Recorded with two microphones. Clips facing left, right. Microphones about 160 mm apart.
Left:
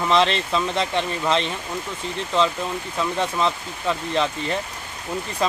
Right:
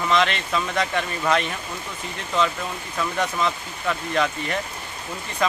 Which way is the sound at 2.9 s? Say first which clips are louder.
Left 1 dB; 30° left (ahead or behind).